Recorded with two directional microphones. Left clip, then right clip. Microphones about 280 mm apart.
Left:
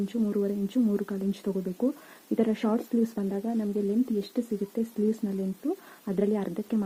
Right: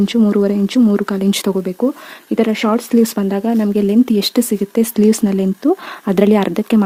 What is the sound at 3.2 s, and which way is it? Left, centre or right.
Speech, right.